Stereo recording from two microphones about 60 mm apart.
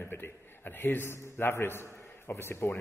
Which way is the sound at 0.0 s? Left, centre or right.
Left.